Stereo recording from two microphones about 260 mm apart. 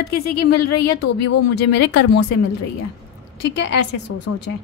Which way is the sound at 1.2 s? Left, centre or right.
Left.